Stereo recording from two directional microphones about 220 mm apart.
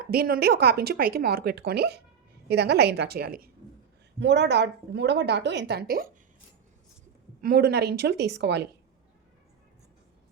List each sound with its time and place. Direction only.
0.1 s a woman's voice: 45° right (ahead or behind)
7.4 s a woman's voice: 45° right (ahead or behind)